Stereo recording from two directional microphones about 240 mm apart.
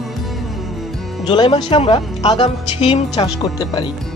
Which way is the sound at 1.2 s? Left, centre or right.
Centre.